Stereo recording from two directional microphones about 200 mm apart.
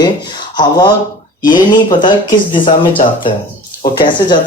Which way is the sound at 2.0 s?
25° left (ahead or behind).